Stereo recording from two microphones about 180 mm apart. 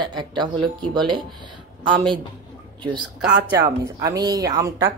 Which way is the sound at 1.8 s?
25° right (ahead or behind).